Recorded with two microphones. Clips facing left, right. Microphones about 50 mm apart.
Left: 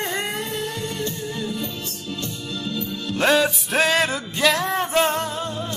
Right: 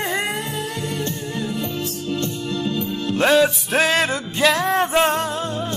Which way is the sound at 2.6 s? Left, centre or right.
Right.